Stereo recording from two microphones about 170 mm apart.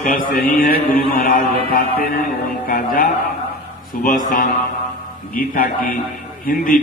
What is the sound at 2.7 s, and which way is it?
Mantra, 55° left (ahead or behind).